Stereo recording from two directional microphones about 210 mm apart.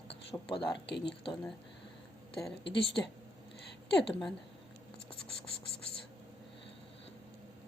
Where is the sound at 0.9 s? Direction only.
55° left (ahead or behind).